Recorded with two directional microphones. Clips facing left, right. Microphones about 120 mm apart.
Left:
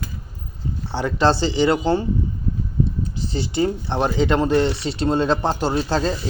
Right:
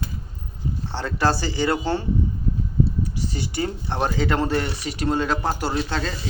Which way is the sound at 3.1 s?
25° left (ahead or behind).